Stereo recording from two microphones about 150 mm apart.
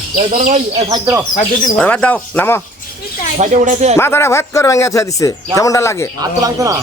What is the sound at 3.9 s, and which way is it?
Speech, 15° left (ahead or behind).